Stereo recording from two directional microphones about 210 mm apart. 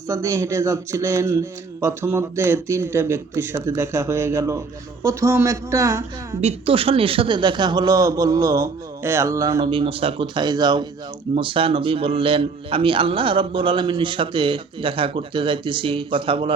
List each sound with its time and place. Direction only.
0.1 s speech: 15° right (ahead or behind)
6.4 s a man's voice: 30° right (ahead or behind)